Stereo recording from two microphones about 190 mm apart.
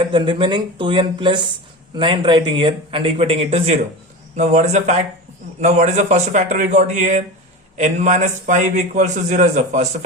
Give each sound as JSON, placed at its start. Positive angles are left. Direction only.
{"t": 0.0, "sound": "a man's voice", "side_deg": -25}